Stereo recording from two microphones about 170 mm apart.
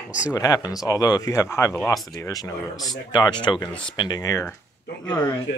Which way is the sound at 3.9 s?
25° left (ahead or behind).